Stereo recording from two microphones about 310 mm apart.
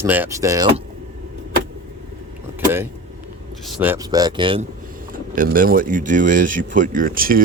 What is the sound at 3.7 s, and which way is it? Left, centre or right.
Speech, centre.